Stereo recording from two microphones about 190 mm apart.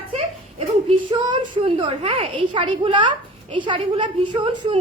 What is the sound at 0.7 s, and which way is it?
A woman's voice, 30° right (ahead or behind).